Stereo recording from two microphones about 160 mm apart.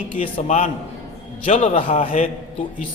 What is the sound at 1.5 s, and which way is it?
Speech, 35° left (ahead or behind).